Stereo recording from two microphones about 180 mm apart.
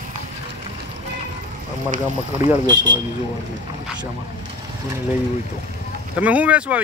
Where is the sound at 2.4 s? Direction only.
25° right (ahead or behind).